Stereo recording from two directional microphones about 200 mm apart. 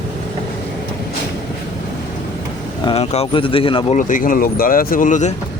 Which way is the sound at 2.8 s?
30° left (ahead or behind).